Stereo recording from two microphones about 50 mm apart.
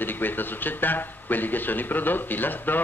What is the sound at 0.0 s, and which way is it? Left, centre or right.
Speech, left.